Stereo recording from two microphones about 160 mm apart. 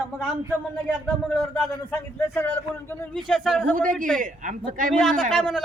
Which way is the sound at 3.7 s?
55° right (ahead or behind).